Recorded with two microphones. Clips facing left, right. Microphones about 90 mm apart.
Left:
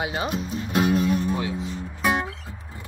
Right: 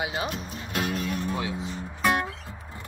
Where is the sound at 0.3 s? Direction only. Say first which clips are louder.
Left 7 dB; 20° left (ahead or behind).